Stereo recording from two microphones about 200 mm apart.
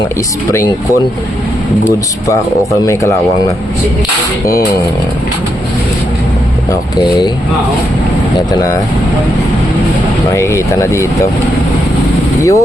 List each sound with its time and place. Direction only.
2.8 s speech: 15° left (ahead or behind)
10.3 s speech: 15° left (ahead or behind)
12.4 s speech: 15° left (ahead or behind)